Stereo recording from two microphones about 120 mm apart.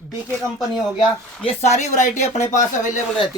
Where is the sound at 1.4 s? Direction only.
70° left (ahead or behind); by 3.0 s 90° left.